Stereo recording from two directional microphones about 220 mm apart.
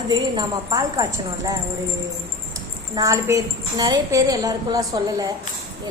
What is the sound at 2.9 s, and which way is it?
A woman's voice, 15° right (ahead or behind).